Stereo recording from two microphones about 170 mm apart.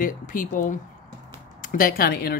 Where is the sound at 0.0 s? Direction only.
55° left (ahead or behind).